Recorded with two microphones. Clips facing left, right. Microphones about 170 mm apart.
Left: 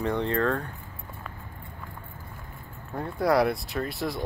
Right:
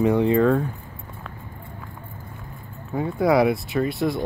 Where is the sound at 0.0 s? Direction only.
10° right (ahead or behind).